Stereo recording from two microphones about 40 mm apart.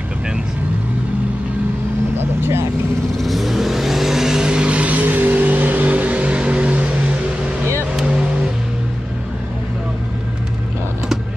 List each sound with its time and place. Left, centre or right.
3.2 s vehicle: centre; by 4.7 s right
4.7 s music: right
7.9 s vehicle: right